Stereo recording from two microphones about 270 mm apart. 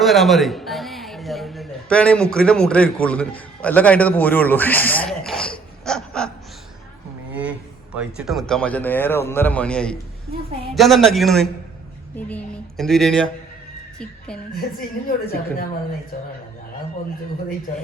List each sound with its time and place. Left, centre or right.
0.0 s a man's voice: centre
7.9 s speech: centre
14.5 s a woman's voice: left